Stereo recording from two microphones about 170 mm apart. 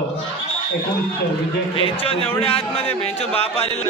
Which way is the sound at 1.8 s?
35° left (ahead or behind).